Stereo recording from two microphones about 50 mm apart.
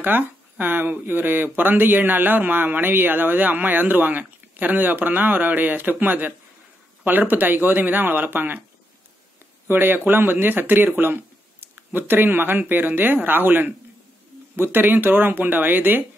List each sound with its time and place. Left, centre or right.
0.0 s a man's voice: right
9.7 s a man's voice: right